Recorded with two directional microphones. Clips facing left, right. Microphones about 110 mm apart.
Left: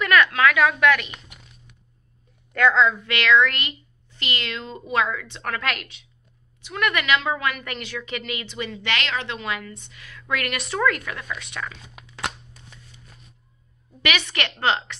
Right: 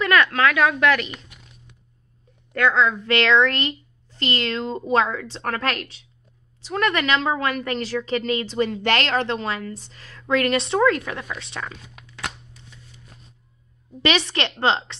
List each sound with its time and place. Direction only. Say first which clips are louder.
0.0 s speech: even; 30° right (ahead or behind)
3.1 s a woman's voice: right 1 dB; 30° right (ahead or behind)
14.0 s speech: right 4 dB; 30° right (ahead or behind)